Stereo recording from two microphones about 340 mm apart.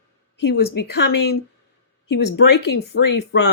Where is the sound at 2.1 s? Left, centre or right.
Left.